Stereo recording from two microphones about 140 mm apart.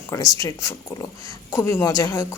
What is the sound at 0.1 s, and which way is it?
Speech, 25° left (ahead or behind).